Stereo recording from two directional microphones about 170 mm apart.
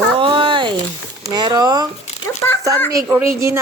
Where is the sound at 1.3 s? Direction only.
25° right (ahead or behind).